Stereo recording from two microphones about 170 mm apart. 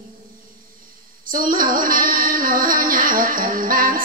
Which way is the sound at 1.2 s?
55° right (ahead or behind).